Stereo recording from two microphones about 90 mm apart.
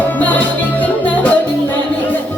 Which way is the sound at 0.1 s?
15° left (ahead or behind).